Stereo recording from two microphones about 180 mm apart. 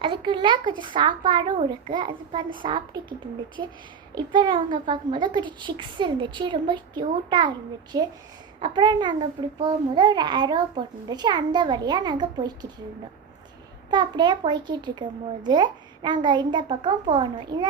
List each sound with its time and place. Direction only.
0.0 s a child's voice: 25° right (ahead or behind)
13.9 s a woman's voice: 25° right (ahead or behind)